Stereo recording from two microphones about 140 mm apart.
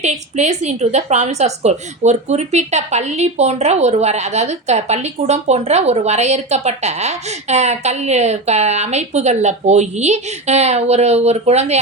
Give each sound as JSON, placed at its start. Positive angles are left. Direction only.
{"t": 0.0, "sound": "a woman's voice", "side_deg": -55}